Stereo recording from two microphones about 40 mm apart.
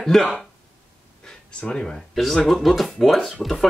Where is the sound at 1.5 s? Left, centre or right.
Left.